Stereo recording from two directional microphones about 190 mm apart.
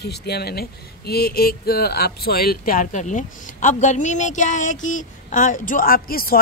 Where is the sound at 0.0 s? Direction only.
55° left (ahead or behind).